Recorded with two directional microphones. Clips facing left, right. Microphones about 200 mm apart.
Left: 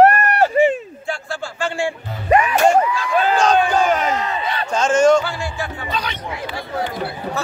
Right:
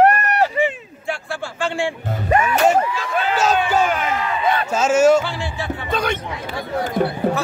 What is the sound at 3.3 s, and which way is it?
Speech, 5° right (ahead or behind).